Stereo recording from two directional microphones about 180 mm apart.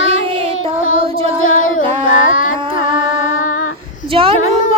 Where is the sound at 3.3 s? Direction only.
45° left (ahead or behind).